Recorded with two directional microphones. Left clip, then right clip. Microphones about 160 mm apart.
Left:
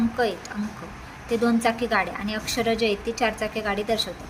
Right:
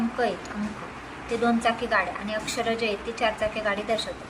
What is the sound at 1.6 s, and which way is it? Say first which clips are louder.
A woman's voice: left 1 dB; 55° left (ahead or behind).